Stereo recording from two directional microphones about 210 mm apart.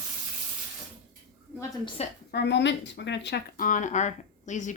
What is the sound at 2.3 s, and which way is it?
Speech, 55° left (ahead or behind).